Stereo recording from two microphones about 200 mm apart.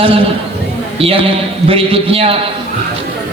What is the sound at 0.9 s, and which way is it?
A man's voice, 30° right (ahead or behind).